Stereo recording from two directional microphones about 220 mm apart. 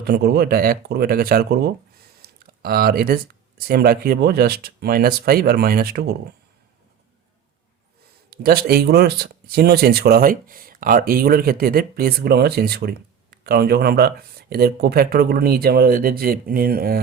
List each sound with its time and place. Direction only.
0.0 s speech: 45° right (ahead or behind)
8.3 s speech: 45° right (ahead or behind)